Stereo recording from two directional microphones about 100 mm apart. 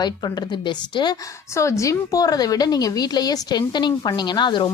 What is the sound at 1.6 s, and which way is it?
A woman's voice, 30° left (ahead or behind).